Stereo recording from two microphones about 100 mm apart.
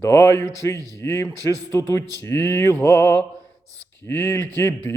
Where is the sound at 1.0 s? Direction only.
30° left (ahead or behind).